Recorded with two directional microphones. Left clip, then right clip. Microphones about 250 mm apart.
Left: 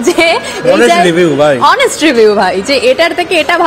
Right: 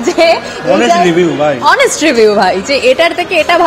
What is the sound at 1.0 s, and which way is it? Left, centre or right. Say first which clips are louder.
Speech: left 2 dB; left.